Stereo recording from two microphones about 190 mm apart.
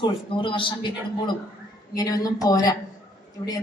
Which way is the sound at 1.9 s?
20° left (ahead or behind).